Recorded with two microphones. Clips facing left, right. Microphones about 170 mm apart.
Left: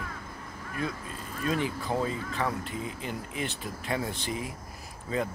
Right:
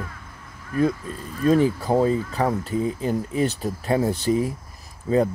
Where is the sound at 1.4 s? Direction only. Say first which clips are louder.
Right 11 dB; 40° right (ahead or behind).